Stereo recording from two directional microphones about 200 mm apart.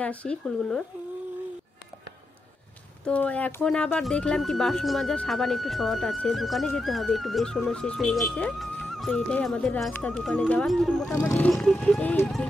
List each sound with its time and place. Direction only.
0.0 s speech: 5° left (ahead or behind)
3.1 s speech: 5° left (ahead or behind)
11.1 s speech: 15° left (ahead or behind)
11.4 s speech: centre (ahead or behind)